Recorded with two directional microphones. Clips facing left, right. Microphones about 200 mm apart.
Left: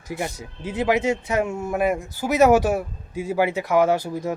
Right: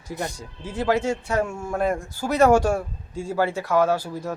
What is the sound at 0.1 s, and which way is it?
A man's voice, 15° left (ahead or behind).